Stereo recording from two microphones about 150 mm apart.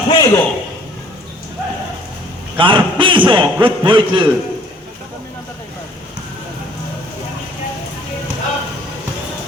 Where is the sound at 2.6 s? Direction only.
35° right (ahead or behind).